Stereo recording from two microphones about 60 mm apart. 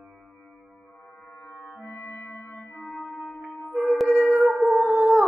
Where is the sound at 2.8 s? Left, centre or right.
Centre.